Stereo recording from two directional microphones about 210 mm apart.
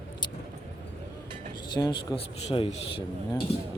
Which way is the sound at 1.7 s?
20° left (ahead or behind).